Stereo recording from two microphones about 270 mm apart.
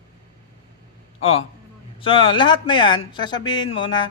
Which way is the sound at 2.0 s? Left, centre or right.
Centre.